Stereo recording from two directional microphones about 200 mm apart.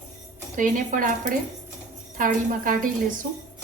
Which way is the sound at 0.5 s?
40° right (ahead or behind).